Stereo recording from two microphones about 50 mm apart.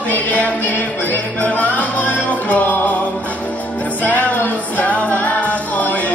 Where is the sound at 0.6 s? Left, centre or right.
Left.